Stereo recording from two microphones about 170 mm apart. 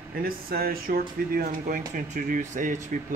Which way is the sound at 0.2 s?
60° right (ahead or behind).